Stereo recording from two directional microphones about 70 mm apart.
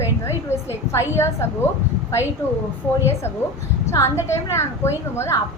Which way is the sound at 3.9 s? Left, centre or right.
Left.